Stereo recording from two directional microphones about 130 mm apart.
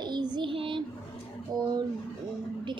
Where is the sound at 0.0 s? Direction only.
35° right (ahead or behind).